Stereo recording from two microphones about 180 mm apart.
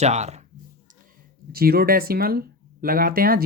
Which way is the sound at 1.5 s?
55° right (ahead or behind).